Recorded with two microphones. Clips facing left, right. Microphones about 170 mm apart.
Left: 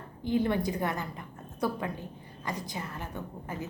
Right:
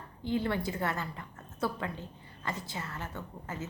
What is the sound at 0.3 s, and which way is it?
A woman's voice, 20° left (ahead or behind).